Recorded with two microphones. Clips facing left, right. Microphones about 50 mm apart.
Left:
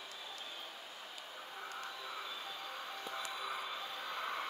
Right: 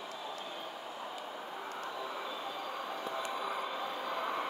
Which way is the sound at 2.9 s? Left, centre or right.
Right.